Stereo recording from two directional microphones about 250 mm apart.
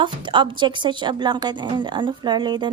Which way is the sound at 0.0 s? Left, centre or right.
Centre.